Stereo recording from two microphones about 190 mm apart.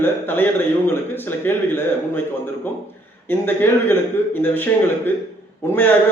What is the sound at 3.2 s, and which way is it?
A man's voice, 10° left (ahead or behind).